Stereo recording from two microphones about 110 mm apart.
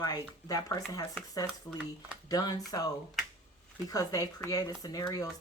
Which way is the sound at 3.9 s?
35° left (ahead or behind).